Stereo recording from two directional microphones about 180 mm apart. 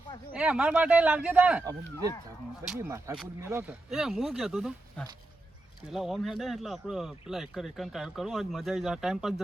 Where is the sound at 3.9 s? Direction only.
Centre (ahead or behind).